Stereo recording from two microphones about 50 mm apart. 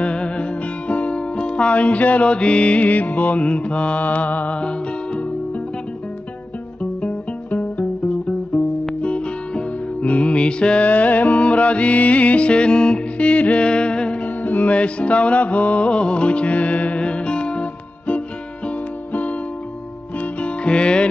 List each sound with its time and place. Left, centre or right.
0.0 s music: left
6.8 s music: left
20.4 s music: left